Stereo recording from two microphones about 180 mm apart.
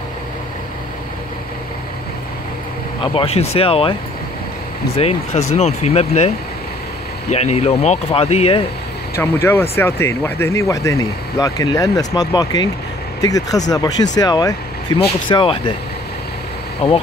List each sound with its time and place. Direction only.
3.0 s speech: 30° left (ahead or behind)
4.9 s speech: 35° left (ahead or behind)
9.2 s speech: 15° left (ahead or behind); by 15.7 s 30° left (ahead or behind)
16.8 s speech: 35° left (ahead or behind)